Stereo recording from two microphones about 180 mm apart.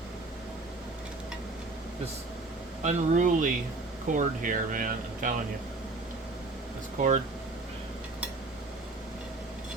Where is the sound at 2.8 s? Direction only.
45° right (ahead or behind).